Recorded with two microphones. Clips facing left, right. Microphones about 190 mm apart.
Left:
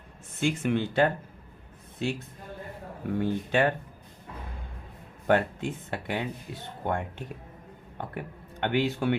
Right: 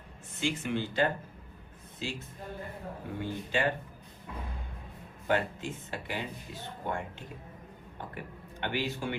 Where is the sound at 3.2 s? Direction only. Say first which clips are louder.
Left 5 dB; 60° left (ahead or behind).